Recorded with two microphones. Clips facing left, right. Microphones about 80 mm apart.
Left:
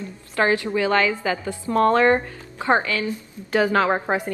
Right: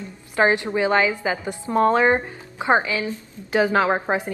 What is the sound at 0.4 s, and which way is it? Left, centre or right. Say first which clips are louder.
A woman's voice: right 1 dB; right.